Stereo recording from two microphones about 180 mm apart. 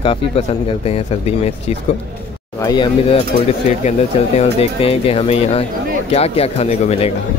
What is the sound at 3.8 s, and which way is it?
Speech, 35° left (ahead or behind).